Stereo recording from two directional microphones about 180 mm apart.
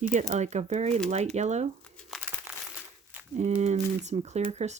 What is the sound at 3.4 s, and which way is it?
Speech, 40° right (ahead or behind).